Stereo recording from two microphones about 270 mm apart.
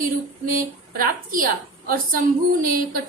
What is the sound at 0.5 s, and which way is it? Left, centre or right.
A woman's voice, right.